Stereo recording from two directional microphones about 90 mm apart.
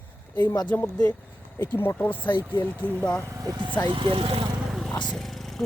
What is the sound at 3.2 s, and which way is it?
Speech, 40° right (ahead or behind).